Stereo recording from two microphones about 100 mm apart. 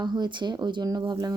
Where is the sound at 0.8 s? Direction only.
35° right (ahead or behind).